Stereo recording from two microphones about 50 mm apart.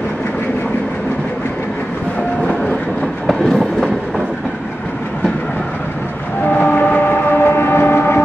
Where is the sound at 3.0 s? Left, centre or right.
Centre.